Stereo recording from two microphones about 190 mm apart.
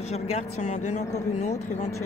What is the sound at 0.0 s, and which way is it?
Speech, 35° left (ahead or behind).